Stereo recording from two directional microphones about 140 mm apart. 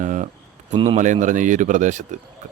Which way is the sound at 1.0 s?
65° right (ahead or behind).